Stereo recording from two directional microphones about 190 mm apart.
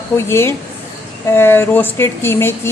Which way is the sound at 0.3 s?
15° left (ahead or behind).